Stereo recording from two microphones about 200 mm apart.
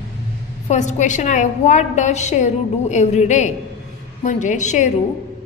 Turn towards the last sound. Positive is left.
turn(degrees=35)  # may be behind; listen again after turning